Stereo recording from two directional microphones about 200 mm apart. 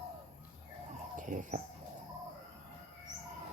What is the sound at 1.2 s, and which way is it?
Bird, 40° right (ahead or behind).